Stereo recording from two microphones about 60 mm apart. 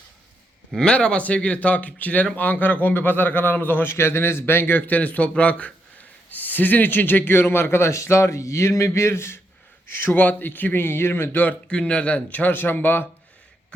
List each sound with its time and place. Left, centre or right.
0.8 s a man's voice: centre
3.9 s a man's voice: left
11.7 s a man's voice: centre; by 13.1 s left